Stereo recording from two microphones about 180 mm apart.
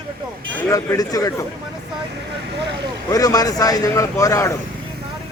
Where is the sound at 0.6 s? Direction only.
15° left (ahead or behind).